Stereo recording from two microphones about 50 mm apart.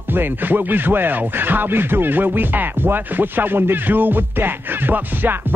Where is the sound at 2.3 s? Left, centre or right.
Right.